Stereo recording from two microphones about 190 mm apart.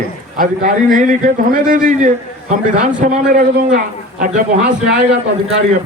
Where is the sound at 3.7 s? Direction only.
50° right (ahead or behind).